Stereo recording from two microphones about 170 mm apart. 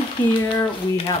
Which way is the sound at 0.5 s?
30° left (ahead or behind).